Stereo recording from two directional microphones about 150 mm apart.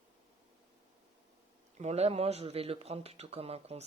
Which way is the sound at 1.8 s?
45° right (ahead or behind).